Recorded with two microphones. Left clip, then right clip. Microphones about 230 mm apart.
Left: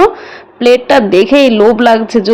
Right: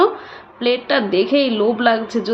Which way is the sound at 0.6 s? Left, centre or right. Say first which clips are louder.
Left 10 dB; left.